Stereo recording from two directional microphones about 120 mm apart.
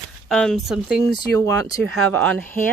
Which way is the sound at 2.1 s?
10° left (ahead or behind).